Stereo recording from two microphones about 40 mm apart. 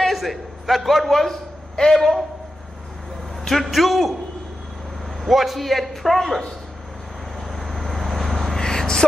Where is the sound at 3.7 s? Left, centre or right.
Centre.